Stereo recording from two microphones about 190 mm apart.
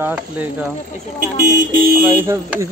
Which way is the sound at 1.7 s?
50° right (ahead or behind).